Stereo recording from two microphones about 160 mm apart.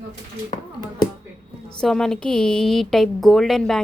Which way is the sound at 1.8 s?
Centre (ahead or behind).